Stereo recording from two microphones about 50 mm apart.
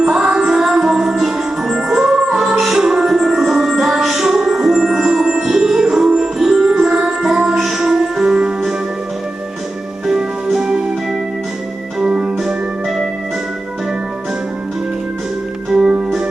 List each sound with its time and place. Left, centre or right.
0.0 s music: centre
6.9 s music: centre
7.3 s music: centre
10.1 s music: centre
12.0 s music: centre
15.7 s organ: centre